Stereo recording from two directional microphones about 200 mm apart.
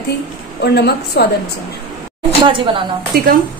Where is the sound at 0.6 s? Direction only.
55° left (ahead or behind).